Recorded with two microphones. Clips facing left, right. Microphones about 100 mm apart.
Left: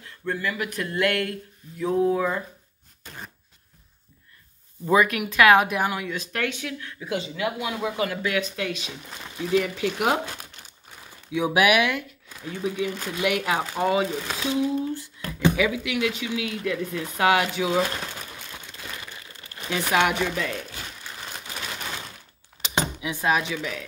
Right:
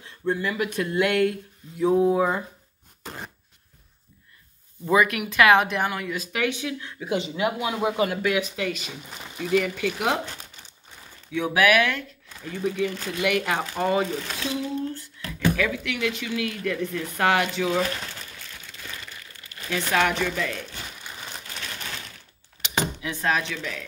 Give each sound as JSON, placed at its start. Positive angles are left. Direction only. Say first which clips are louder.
{"t": 0.0, "sound": "speech", "louder": "right 2 dB", "side_deg": -20}
{"t": 4.8, "sound": "speech", "louder": "left 1 dB", "side_deg": 0}
{"t": 8.5, "sound": "speech", "louder": "right 1 dB", "side_deg": 0}
{"t": 11.3, "sound": "speech", "louder": "even", "side_deg": 15}
{"t": 16.3, "sound": "a sound", "louder": "even", "side_deg": 15}
{"t": 20.1, "sound": "speech", "louder": "even", "side_deg": 10}
{"t": 21.0, "sound": "a sound", "louder": "left 1 dB", "side_deg": 0}
{"t": 21.5, "sound": "a sound", "louder": "left 4 dB", "side_deg": 10}
{"t": 22.8, "sound": "speech", "louder": "even", "side_deg": 15}